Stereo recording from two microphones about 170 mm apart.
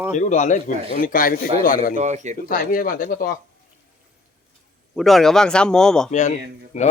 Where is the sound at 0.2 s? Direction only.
45° left (ahead or behind).